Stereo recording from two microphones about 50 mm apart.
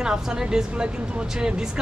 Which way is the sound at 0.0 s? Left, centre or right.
Centre.